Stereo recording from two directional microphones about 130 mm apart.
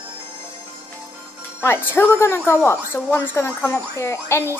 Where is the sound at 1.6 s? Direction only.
15° left (ahead or behind).